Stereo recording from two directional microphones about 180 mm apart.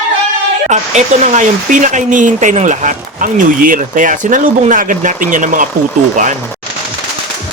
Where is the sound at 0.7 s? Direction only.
40° right (ahead or behind).